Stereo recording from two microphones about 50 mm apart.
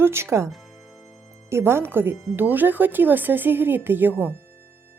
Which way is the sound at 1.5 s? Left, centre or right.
Right.